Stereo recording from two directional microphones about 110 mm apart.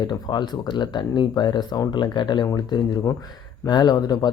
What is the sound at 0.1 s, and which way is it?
Speech, 40° left (ahead or behind).